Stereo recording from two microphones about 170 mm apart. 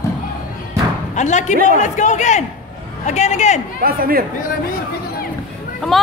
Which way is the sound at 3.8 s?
60° right (ahead or behind).